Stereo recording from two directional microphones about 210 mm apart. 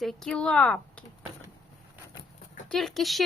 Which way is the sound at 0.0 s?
Centre (ahead or behind).